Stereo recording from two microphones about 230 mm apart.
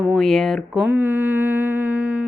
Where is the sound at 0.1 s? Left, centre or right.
Centre.